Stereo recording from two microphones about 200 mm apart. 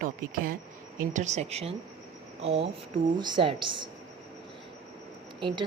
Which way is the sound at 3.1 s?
20° right (ahead or behind).